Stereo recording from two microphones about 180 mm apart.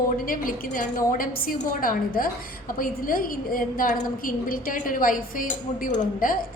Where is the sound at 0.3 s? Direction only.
50° left (ahead or behind).